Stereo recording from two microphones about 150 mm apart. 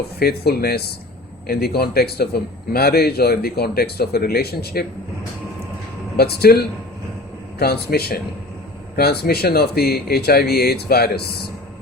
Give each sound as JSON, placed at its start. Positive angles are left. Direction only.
{"t": 0.2, "sound": "speech", "side_deg": 90}
{"t": 6.1, "sound": "speech", "side_deg": 90}